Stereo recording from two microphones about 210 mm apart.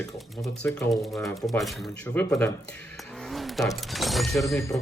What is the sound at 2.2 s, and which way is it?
Speech, 10° left (ahead or behind).